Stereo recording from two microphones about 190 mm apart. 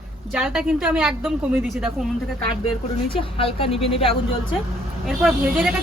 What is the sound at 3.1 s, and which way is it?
Speech, 30° left (ahead or behind).